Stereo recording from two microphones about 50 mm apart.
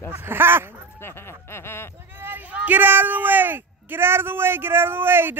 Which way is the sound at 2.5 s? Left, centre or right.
Right.